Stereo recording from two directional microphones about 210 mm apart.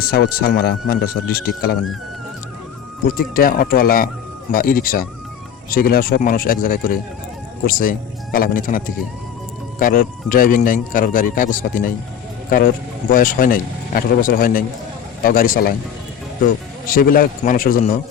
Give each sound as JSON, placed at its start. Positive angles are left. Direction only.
{"t": 0.0, "sound": "speech", "side_deg": 45}
{"t": 3.3, "sound": "speech", "side_deg": 45}
{"t": 16.8, "sound": "speech", "side_deg": 40}